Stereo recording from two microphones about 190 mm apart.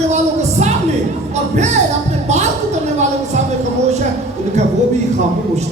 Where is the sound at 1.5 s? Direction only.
40° right (ahead or behind).